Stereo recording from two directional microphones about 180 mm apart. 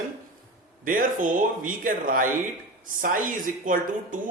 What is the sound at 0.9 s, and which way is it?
A woman's voice, 50° right (ahead or behind).